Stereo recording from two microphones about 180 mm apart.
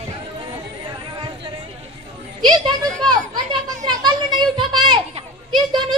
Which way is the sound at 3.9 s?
25° right (ahead or behind).